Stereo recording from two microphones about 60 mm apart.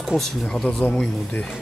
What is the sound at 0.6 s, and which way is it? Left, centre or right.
Speech, centre.